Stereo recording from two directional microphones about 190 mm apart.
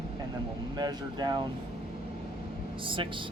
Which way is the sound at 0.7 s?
20° right (ahead or behind).